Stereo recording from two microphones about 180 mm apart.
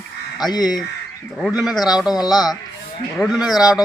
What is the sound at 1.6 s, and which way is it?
Speech, centre (ahead or behind).